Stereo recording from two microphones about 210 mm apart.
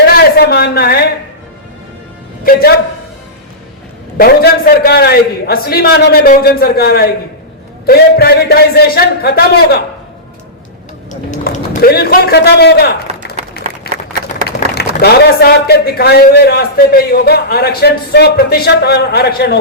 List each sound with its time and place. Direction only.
0.0 s a sound: 50° left (ahead or behind)
2.4 s a man's voice: 45° left (ahead or behind)
4.2 s speech: 45° left (ahead or behind)
11.1 s a man's voice: 35° left (ahead or behind)
13.1 s run: 30° right (ahead or behind)
14.8 s speech: 50° left (ahead or behind)